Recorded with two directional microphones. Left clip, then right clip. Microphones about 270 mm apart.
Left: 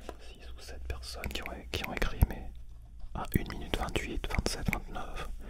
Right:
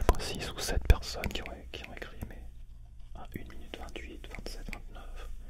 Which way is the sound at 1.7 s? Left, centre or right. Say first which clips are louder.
Left 8 dB; left.